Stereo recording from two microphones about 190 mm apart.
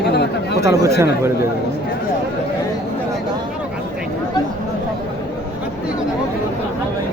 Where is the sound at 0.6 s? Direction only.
15° right (ahead or behind).